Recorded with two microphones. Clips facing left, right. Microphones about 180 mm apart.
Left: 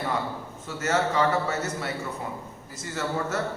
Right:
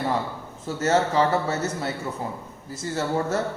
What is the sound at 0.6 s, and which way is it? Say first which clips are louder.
A man's voice: right 4 dB; 30° right (ahead or behind).